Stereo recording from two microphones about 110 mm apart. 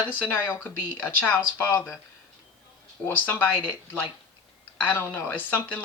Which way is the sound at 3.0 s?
15° left (ahead or behind).